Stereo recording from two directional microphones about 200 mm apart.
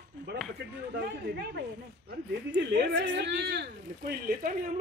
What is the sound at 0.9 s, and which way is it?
Speech, 55° right (ahead or behind).